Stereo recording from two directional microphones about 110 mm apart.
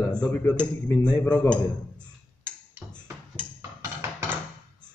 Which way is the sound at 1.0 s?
10° left (ahead or behind).